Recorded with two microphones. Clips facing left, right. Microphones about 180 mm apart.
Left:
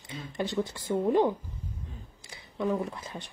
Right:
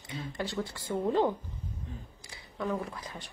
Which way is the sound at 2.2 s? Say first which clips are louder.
Left 4 dB; 20° left (ahead or behind).